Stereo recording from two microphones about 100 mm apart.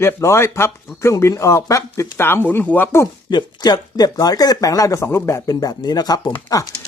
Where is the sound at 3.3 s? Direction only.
45° left (ahead or behind).